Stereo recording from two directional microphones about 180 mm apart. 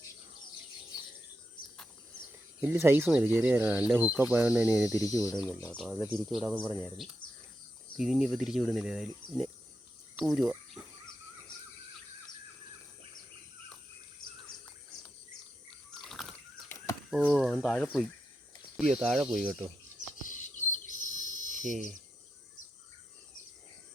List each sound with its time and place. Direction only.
2.6 s speech: 10° right (ahead or behind)
4.9 s speech: 20° left (ahead or behind)
5.7 s speech: centre (ahead or behind)
7.9 s speech: 5° right (ahead or behind)
16.0 s a sound: centre (ahead or behind)
16.6 s a sound: 15° left (ahead or behind)
17.1 s speech: 5° left (ahead or behind)
20.2 s bird: 45° left (ahead or behind)
21.6 s speech: 45° right (ahead or behind)